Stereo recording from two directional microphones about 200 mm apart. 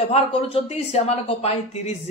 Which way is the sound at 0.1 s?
30° left (ahead or behind).